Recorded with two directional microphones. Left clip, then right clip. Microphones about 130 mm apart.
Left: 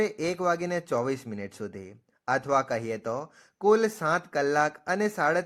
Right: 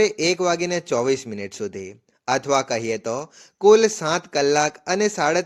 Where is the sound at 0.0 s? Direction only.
25° right (ahead or behind).